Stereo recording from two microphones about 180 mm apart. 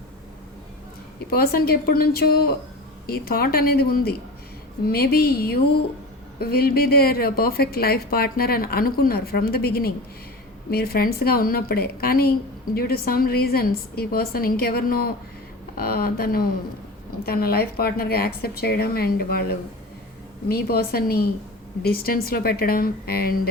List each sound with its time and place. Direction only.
1.3 s a woman's voice: 60° left (ahead or behind)